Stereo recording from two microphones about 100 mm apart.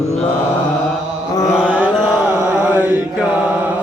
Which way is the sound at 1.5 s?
15° right (ahead or behind).